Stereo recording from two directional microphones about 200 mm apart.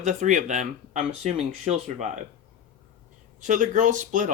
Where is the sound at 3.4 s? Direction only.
40° right (ahead or behind).